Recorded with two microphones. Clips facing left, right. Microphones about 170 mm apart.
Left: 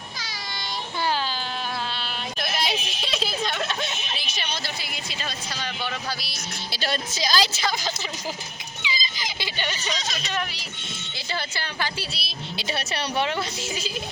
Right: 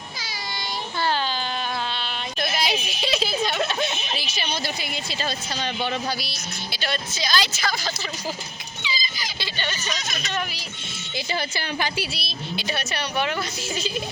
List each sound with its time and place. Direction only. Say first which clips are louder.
2.4 s a sound: right 3 dB; centre (ahead or behind)
4.4 s speech: right 4 dB; 15° right (ahead or behind)
6.7 s a woman's voice: left 1 dB; 35° left (ahead or behind)
7.6 s a woman's voice: even; 20° left (ahead or behind)
8.8 s a sound: even; 20° left (ahead or behind)
11.3 s a woman's voice: right 2 dB; 15° right (ahead or behind)
12.5 s a woman's voice: even; 30° left (ahead or behind)